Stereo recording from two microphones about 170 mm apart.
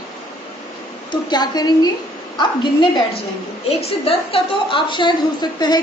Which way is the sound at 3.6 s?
35° left (ahead or behind).